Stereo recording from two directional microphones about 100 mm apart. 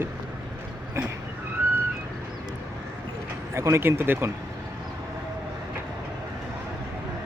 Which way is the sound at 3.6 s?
25° right (ahead or behind).